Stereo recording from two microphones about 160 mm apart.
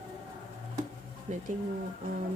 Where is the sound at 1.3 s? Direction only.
45° right (ahead or behind).